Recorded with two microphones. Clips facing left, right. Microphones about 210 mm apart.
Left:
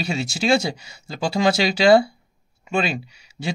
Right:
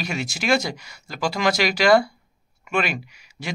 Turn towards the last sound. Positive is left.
turn(degrees=30)  # may be behind; listen again after turning